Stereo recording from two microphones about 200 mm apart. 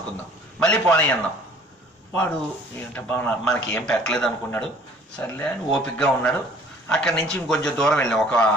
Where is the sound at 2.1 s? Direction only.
10° left (ahead or behind).